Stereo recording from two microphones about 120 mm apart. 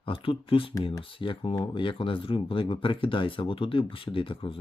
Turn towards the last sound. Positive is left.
turn(degrees=45)  # may be behind; listen again after turning